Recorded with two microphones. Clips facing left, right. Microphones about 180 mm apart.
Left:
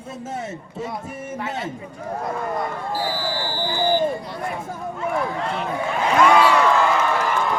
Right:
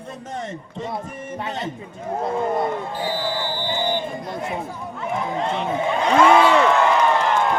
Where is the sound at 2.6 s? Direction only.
20° right (ahead or behind).